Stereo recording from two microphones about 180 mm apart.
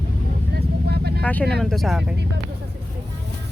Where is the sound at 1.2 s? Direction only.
10° left (ahead or behind).